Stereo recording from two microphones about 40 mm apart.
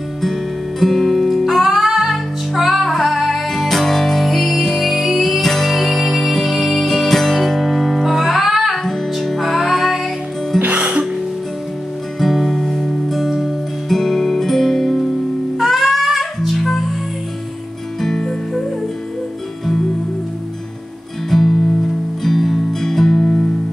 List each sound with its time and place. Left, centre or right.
0.2 s music: centre
8.7 s music: centre
10.6 s music: right
12.2 s music: centre
18.0 s music: centre
21.3 s music: centre